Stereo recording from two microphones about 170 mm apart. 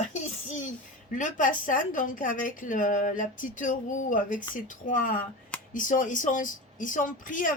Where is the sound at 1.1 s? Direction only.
50° left (ahead or behind).